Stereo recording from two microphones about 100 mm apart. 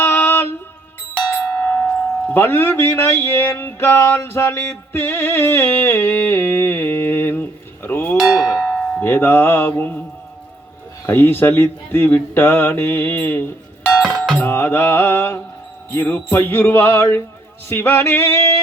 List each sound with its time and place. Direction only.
0.0 s music: 25° left (ahead or behind)
1.1 s speech: 20° left (ahead or behind)
8.1 s speech: 5° left (ahead or behind)
8.4 s tubular bells: 25° left (ahead or behind)
8.8 s speech: 20° left (ahead or behind)
11.0 s speech: 25° left (ahead or behind)
14.3 s music: 20° left (ahead or behind)
15.9 s speech: 20° left (ahead or behind)